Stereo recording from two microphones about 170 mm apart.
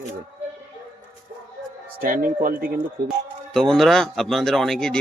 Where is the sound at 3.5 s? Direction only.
Centre (ahead or behind).